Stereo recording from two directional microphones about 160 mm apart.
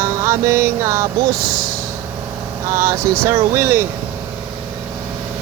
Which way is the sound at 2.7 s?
15° right (ahead or behind).